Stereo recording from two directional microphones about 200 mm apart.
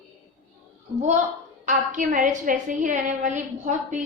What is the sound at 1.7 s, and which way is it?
A woman's voice, 40° right (ahead or behind).